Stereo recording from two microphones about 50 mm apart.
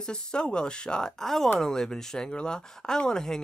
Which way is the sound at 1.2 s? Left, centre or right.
Centre.